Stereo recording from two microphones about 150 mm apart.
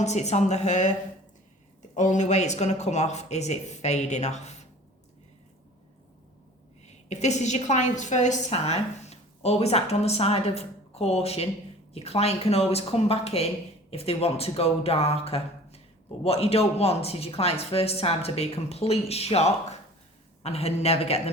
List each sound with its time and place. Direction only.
0.0 s speech: 50° left (ahead or behind)
2.0 s speech: 55° left (ahead or behind)
6.8 s a woman's voice: 50° left (ahead or behind)